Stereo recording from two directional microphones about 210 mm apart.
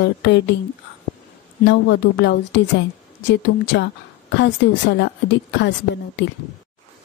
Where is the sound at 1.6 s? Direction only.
55° left (ahead or behind).